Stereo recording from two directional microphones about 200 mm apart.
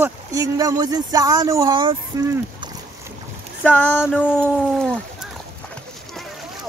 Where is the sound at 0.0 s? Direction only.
15° right (ahead or behind).